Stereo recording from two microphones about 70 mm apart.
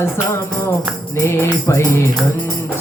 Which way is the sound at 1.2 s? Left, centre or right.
Left.